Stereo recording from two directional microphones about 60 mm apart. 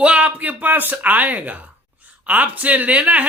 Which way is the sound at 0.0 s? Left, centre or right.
Right.